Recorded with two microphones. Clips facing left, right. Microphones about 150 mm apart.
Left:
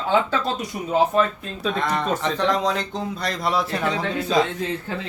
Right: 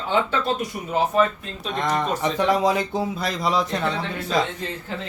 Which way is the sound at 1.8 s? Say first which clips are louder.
Right 3 dB; 15° right (ahead or behind).